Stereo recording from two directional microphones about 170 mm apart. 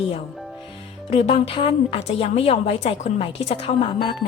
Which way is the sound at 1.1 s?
35° left (ahead or behind).